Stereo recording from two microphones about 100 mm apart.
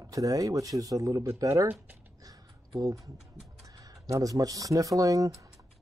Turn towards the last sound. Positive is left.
turn(degrees=-35)  # may be behind; listen again after turning